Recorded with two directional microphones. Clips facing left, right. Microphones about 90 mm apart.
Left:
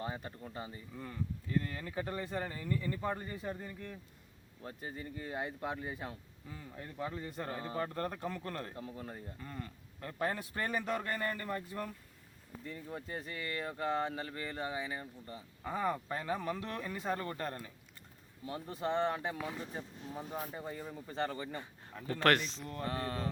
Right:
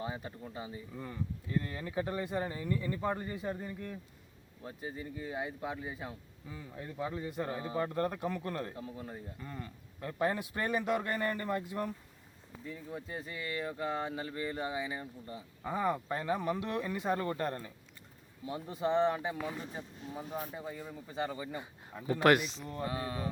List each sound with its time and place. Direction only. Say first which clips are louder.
0.0 s speech: right 1 dB; 5° right (ahead or behind)
6.5 s speech: right 3 dB; 15° right (ahead or behind)
12.6 s speech: right 1 dB; 5° right (ahead or behind); by 17.7 s 25° right (ahead or behind)
18.4 s speech: right 3 dB; 10° right (ahead or behind)